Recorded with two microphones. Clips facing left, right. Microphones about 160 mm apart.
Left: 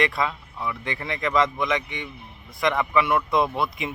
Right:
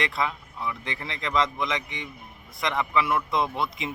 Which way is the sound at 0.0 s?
20° right (ahead or behind).